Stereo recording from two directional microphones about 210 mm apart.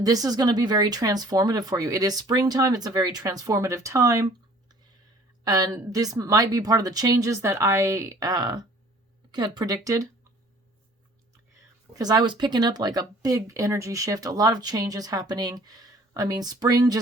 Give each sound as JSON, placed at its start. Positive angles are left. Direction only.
{"t": 0.0, "sound": "speech", "side_deg": -15}
{"t": 5.5, "sound": "speech", "side_deg": -15}
{"t": 11.9, "sound": "speech", "side_deg": -20}